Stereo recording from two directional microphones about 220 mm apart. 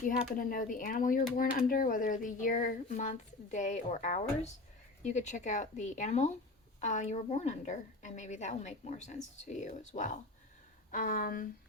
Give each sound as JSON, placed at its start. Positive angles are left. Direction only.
{"t": 0.3, "sound": "speech", "side_deg": 40}